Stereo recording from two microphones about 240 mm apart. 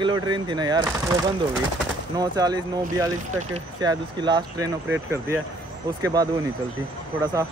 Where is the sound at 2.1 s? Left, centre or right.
Centre.